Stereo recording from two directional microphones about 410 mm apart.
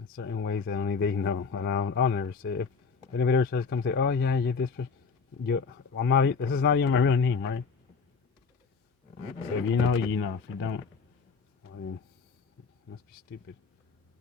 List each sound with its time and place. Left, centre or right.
0.2 s speech: left
9.6 s speech: left
13.1 s speech: left